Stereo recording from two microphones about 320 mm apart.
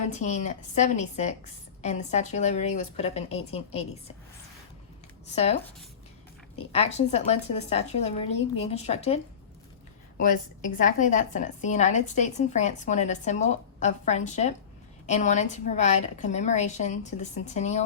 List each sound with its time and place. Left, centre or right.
0.0 s a woman's voice: left
5.3 s a woman's voice: centre
6.7 s a woman's voice: centre